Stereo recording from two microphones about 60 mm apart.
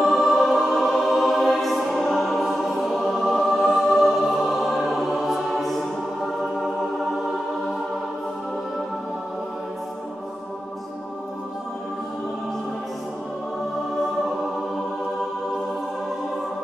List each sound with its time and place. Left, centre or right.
0.0 s music: centre